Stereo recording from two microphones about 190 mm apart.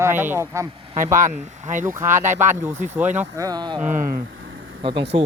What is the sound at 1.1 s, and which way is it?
Speech, 45° right (ahead or behind).